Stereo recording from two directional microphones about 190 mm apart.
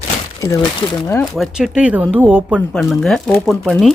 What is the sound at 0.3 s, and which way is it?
Speech, 15° left (ahead or behind).